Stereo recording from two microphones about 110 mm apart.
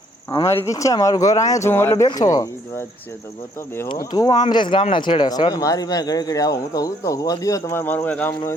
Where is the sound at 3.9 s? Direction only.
35° left (ahead or behind).